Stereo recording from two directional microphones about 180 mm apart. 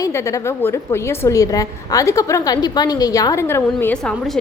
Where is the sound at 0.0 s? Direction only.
15° left (ahead or behind).